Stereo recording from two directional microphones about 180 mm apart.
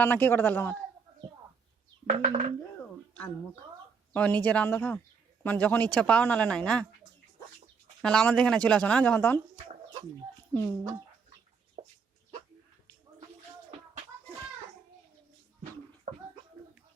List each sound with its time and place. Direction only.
0.0 s speech: 10° left (ahead or behind)
2.0 s speech: 35° right (ahead or behind)
2.6 s a sound: 10° left (ahead or behind)
4.1 s speech: 10° left (ahead or behind)
8.0 s speech: 5° left (ahead or behind)
10.5 s speech: 10° left (ahead or behind)
11.8 s a sound: 30° right (ahead or behind)